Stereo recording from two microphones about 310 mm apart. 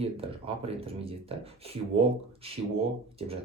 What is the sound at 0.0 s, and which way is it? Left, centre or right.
Speech, centre.